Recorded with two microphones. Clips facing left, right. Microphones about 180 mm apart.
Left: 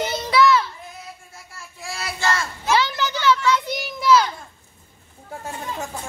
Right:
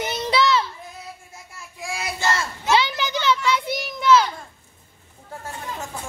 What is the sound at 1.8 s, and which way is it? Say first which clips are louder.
Child singing: right 1 dB; 15° right (ahead or behind).